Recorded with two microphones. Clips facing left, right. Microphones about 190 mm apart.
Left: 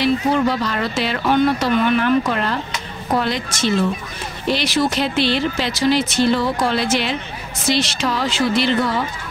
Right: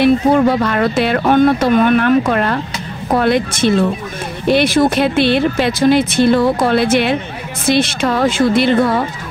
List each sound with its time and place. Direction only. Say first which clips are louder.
0.0 s speech: right 6 dB; 55° right (ahead or behind)